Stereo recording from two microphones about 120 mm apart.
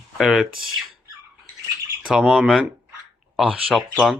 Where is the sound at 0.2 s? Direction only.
Centre (ahead or behind).